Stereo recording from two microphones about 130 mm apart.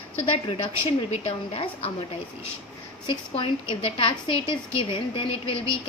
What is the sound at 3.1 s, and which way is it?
A woman's voice, 45° left (ahead or behind).